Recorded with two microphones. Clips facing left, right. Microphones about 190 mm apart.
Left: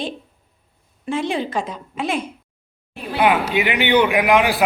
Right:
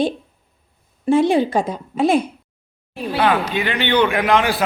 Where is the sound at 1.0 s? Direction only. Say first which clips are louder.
Right 8 dB; 35° right (ahead or behind).